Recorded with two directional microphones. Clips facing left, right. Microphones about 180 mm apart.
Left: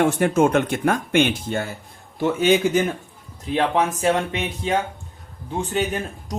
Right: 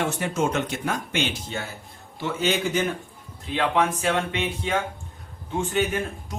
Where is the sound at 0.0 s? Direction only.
55° left (ahead or behind).